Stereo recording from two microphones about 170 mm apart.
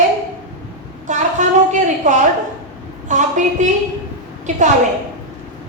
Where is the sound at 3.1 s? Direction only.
45° right (ahead or behind).